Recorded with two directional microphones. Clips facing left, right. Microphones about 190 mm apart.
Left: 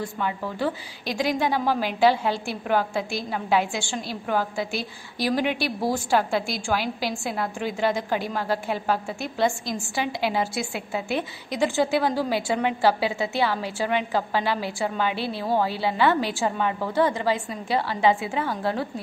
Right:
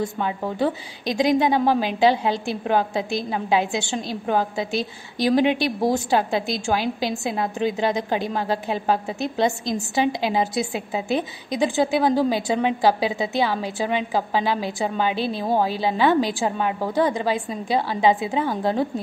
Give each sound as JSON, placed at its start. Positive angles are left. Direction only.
{"t": 0.0, "sound": "a woman's voice", "side_deg": -20}